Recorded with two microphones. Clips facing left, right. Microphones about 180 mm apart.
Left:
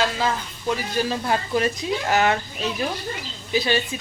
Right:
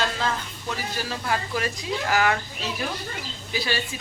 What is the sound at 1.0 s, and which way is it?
Speech, 25° left (ahead or behind).